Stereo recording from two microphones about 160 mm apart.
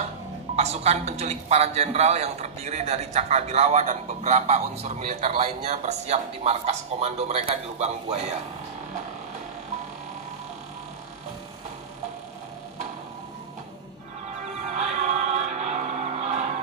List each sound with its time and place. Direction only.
0.6 s a man's voice: 40° right (ahead or behind)
14.7 s music: 45° right (ahead or behind)